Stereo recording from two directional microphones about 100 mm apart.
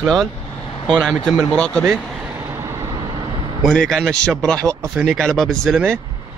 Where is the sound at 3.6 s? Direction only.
5° left (ahead or behind).